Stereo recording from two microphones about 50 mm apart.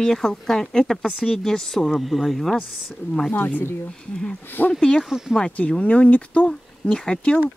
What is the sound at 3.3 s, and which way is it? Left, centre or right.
Speech, left.